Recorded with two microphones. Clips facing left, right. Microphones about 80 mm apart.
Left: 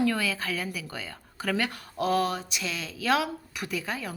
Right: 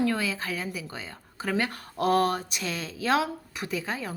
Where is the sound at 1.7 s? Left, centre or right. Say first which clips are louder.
Right 2 dB; right.